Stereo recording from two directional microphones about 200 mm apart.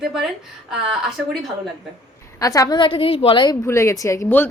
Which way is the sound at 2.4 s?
15° left (ahead or behind).